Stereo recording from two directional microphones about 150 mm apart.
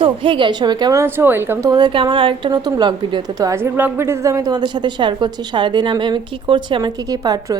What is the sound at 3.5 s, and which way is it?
A woman's voice, 15° right (ahead or behind).